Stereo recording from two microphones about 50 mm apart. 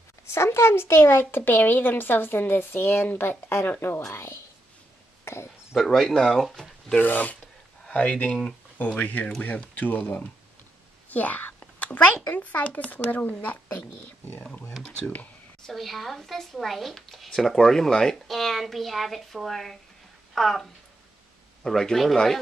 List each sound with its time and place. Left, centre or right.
0.3 s speech: left
4.1 s a woman's voice: left
5.2 s a sound: left
5.9 s speech: centre
7.0 s speech: left
7.9 s speech: left
8.7 s speech: left
11.8 s a sound: left
12.3 s speech: left
15.6 s speech: centre
21.6 s speech: centre